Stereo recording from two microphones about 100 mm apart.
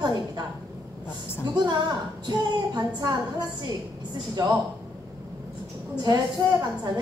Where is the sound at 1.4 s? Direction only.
45° right (ahead or behind).